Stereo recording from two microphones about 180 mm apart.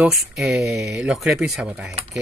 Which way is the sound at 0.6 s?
15° right (ahead or behind).